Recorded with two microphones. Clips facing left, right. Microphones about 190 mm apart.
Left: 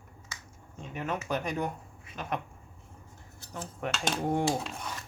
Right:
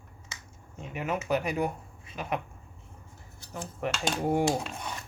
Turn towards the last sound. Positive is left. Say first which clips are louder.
# right 2 dB
turn(degrees=-10)  # may be behind; listen again after turning